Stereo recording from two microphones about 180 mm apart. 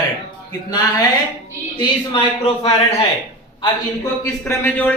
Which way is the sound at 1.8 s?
30° left (ahead or behind).